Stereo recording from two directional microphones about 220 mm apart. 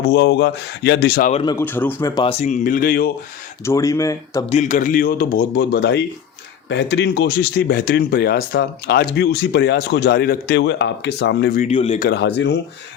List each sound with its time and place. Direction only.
0.0 s speech: 50° left (ahead or behind)
1.3 s speech: 20° left (ahead or behind)
1.6 s speech: 10° left (ahead or behind)
2.4 s a man's voice: 35° left (ahead or behind)
3.7 s speech: 15° left (ahead or behind)
4.4 s a man's voice: 30° left (ahead or behind); by 11.6 s 50° left (ahead or behind)
11.6 s speech: 30° left (ahead or behind)
12.0 s speech: 50° left (ahead or behind)